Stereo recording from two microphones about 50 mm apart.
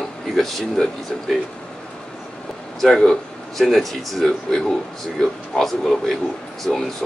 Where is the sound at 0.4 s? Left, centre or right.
Centre.